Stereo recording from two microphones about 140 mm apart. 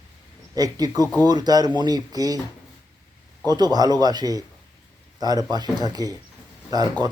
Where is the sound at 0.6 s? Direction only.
25° right (ahead or behind).